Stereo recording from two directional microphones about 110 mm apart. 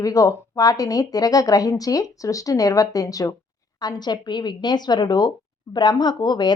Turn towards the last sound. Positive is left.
turn(degrees=40)  # may be behind; listen again after turning